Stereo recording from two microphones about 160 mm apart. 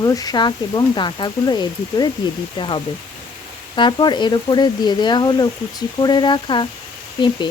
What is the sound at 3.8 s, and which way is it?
Speech, 30° left (ahead or behind).